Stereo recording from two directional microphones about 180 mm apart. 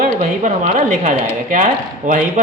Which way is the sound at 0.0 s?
45° right (ahead or behind).